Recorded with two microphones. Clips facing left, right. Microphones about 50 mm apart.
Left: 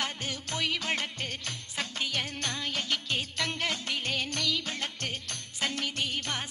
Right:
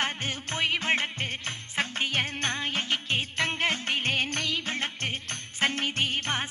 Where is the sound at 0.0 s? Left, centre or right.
Right.